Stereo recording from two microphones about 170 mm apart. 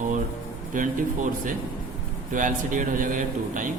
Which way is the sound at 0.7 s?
50° right (ahead or behind).